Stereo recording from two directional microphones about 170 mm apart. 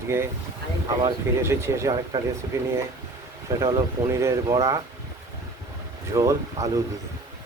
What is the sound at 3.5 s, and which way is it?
Speech, 20° right (ahead or behind).